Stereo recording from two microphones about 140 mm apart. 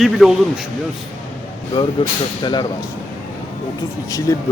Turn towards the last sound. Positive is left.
turn(degrees=25)  # may be behind; listen again after turning